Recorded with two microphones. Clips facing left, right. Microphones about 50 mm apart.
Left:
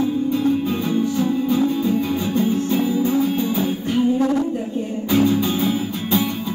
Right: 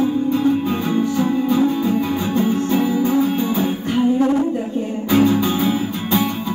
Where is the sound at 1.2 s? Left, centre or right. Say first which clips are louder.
Right 3 dB; right.